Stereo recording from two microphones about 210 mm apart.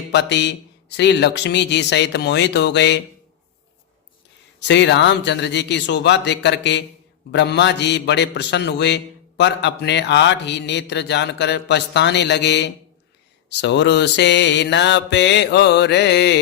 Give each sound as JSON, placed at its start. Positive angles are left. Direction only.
{"t": 0.1, "sound": "a man's voice", "side_deg": 55}
{"t": 4.7, "sound": "a man's voice", "side_deg": 55}